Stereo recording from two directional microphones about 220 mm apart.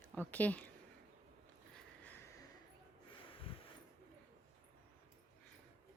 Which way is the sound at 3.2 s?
25° left (ahead or behind).